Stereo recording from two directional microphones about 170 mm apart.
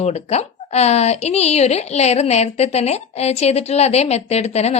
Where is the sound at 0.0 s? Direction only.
40° left (ahead or behind).